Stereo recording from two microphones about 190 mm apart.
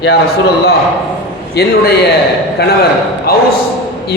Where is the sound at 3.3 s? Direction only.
50° left (ahead or behind).